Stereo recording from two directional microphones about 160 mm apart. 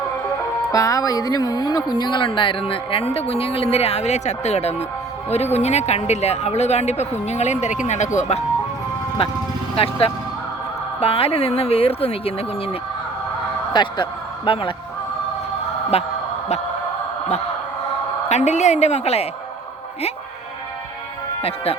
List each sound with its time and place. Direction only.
0.7 s speech: 20° left (ahead or behind); by 8.4 s 45° left (ahead or behind)
9.7 s speech: 35° left (ahead or behind)
13.7 s speech: 30° left (ahead or behind)
15.9 s speech: 40° left (ahead or behind)
18.3 s speech: 45° left (ahead or behind)
21.4 s speech: 40° left (ahead or behind)